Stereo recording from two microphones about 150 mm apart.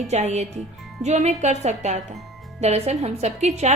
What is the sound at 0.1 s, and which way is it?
A woman's voice, 50° right (ahead or behind).